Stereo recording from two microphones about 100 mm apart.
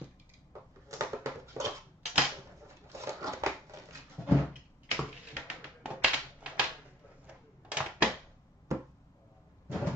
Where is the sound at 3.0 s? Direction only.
30° right (ahead or behind).